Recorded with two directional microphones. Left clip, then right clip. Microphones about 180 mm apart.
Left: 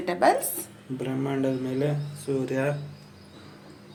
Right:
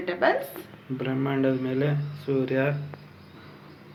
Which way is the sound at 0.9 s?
5° left (ahead or behind).